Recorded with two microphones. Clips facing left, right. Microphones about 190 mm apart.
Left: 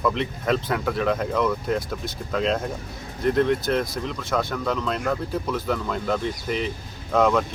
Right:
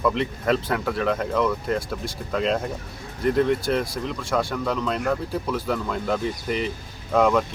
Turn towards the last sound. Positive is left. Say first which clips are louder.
# right 1 dB
turn(degrees=-5)  # may be behind; listen again after turning